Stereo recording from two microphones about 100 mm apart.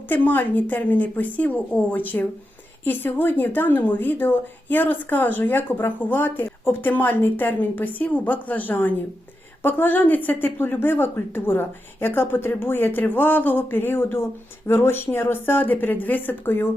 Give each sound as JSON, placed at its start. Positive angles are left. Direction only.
{"t": 0.1, "sound": "a woman's voice", "side_deg": 20}